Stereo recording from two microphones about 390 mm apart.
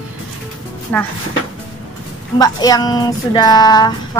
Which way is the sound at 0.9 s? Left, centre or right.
Centre.